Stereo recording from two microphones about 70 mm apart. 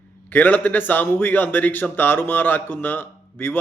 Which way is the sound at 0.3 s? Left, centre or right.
Left.